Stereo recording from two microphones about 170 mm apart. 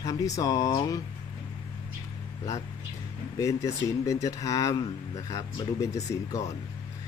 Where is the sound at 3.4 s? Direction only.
20° left (ahead or behind).